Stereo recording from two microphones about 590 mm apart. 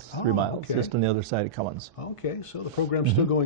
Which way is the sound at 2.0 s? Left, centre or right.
Left.